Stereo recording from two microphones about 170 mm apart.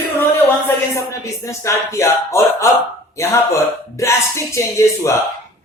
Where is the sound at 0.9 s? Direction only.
15° left (ahead or behind).